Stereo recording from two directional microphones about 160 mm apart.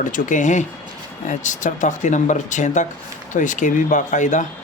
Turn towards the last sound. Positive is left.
turn(degrees=50)  # may be behind; listen again after turning